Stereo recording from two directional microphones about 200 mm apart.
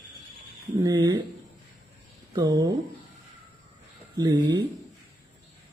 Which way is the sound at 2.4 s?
20° right (ahead or behind).